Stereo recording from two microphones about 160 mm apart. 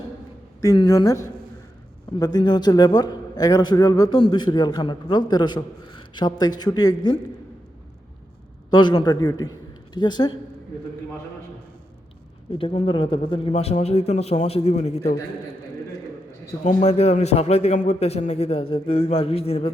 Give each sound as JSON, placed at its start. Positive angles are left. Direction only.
{"t": 0.6, "sound": "a man's voice", "side_deg": 20}
{"t": 8.7, "sound": "a man's voice", "side_deg": 25}
{"t": 12.5, "sound": "a man's voice", "side_deg": 35}
{"t": 16.6, "sound": "a man's voice", "side_deg": 40}